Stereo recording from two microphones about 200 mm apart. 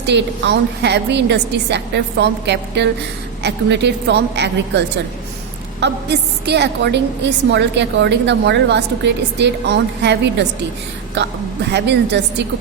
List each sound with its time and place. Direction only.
0.1 s a woman's voice: 60° right (ahead or behind)
5.8 s a woman's voice: 55° right (ahead or behind)